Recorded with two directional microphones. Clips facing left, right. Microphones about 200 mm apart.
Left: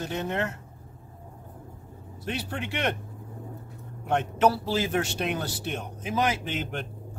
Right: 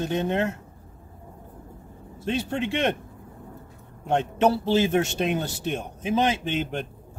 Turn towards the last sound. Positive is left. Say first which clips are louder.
# right 4 dB
turn(degrees=-25)  # may be behind; listen again after turning